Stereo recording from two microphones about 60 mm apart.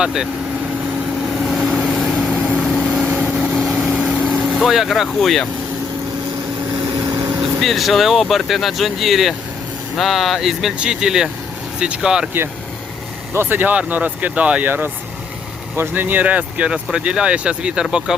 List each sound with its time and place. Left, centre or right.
0.0 s speech: centre
1.5 s vehicle: centre
2.4 s vehicle: centre
2.8 s vehicle: centre
3.1 s vehicle: right
3.5 s vehicle: centre
3.9 s vehicle: right
4.5 s speech: centre
7.6 s speech: centre
13.3 s speech: right
13.6 s speech: right
15.7 s speech: right; by 18.2 s centre